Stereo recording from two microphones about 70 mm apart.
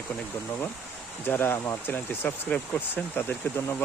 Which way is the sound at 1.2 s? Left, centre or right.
Left.